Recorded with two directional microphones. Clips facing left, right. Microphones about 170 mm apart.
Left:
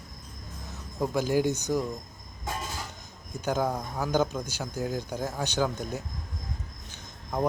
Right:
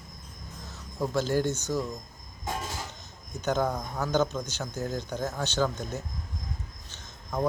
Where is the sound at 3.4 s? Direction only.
10° left (ahead or behind).